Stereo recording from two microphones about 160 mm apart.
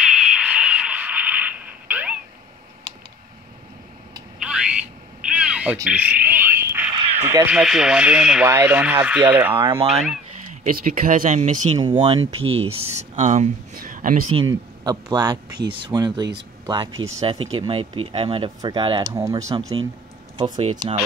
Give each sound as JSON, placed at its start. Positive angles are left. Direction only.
{"t": 0.0, "sound": "a sound", "side_deg": -5}
{"t": 4.4, "sound": "a sound", "side_deg": -5}
{"t": 7.2, "sound": "speech", "side_deg": -15}
{"t": 7.5, "sound": "speech", "side_deg": -5}
{"t": 9.8, "sound": "speech", "side_deg": -40}
{"t": 10.5, "sound": "speech", "side_deg": -55}
{"t": 12.1, "sound": "speech", "side_deg": -35}
{"t": 13.1, "sound": "a sound", "side_deg": -50}
{"t": 14.3, "sound": "speech", "side_deg": -30}